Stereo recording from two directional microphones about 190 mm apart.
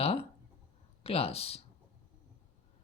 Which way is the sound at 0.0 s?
30° left (ahead or behind).